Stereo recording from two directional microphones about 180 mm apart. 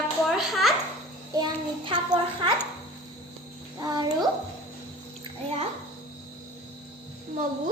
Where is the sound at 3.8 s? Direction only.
20° right (ahead or behind).